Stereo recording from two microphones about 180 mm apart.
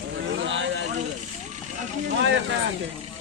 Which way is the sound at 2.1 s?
90° right.